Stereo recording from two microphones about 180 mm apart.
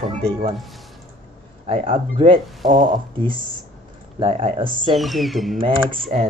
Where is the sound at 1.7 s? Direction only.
35° right (ahead or behind).